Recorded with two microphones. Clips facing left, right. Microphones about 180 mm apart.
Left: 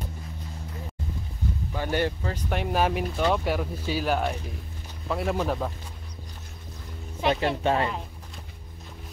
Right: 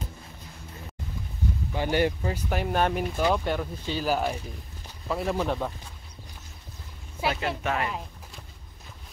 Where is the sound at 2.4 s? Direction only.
Centre (ahead or behind).